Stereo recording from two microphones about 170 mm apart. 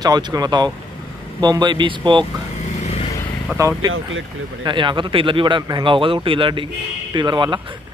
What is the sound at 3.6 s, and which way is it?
Speech, 20° right (ahead or behind).